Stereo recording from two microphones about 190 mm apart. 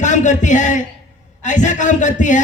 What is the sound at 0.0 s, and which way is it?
A man's voice, 40° left (ahead or behind).